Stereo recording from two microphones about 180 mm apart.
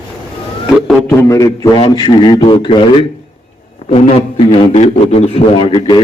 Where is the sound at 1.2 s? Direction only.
20° left (ahead or behind).